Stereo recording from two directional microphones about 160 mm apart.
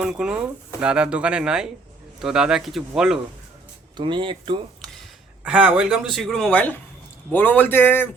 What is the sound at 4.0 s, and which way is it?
Speech, 30° right (ahead or behind).